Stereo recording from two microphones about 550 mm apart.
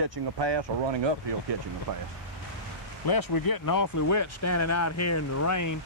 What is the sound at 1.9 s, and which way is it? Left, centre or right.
Speech, right.